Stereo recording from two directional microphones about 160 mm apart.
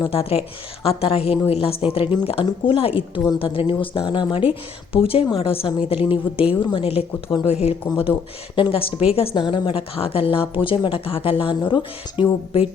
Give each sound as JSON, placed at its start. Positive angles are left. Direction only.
{"t": 0.0, "sound": "a woman's voice", "side_deg": 35}
{"t": 12.2, "sound": "speech", "side_deg": -10}